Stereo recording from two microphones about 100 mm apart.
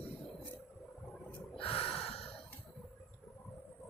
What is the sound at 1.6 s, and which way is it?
Snort, 70° left (ahead or behind).